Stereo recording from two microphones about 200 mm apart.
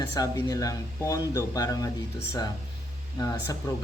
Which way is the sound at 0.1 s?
20° left (ahead or behind).